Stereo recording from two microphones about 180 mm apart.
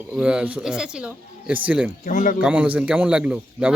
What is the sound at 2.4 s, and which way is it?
Speech, 10° right (ahead or behind).